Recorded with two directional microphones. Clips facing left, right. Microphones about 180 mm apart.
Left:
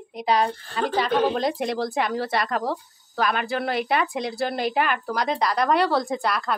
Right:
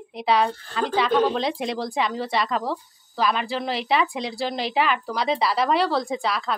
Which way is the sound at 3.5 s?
55° left (ahead or behind).